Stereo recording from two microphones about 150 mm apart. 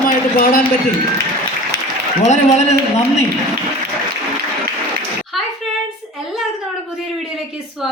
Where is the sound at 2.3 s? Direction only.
50° left (ahead or behind).